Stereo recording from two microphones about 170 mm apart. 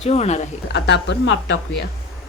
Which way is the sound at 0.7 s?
85° left.